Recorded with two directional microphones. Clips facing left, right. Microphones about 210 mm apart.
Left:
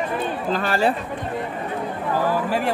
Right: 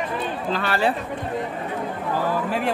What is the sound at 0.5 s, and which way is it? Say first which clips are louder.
Speech: left 2 dB; 40° left (ahead or behind).